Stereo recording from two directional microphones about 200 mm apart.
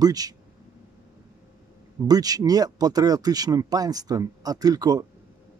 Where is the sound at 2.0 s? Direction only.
20° right (ahead or behind).